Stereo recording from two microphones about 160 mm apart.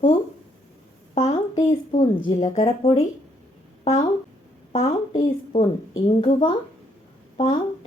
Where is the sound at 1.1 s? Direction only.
45° left (ahead or behind).